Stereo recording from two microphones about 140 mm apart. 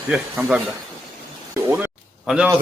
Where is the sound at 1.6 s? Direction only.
15° right (ahead or behind).